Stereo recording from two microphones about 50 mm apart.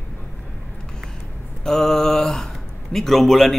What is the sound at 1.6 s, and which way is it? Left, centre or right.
Speech, centre.